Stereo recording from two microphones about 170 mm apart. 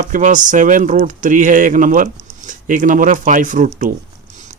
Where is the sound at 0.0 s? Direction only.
50° right (ahead or behind).